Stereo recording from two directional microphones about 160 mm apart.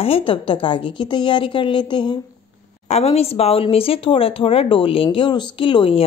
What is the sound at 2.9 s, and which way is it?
A woman's voice, 40° left (ahead or behind).